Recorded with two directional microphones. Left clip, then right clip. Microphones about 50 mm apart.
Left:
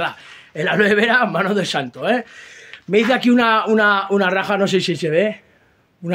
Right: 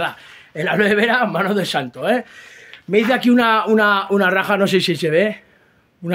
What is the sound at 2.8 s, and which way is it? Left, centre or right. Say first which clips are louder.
Speech: even; centre.